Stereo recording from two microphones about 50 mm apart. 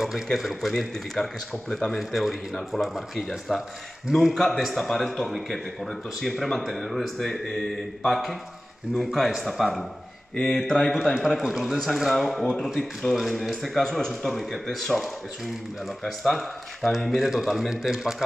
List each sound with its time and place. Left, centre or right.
0.0 s a man's voice: centre
10.3 s speech: centre
10.7 s a man's voice: centre
11.2 s a man's voice: centre